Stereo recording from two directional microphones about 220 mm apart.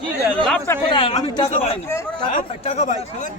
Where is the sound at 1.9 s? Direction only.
10° left (ahead or behind).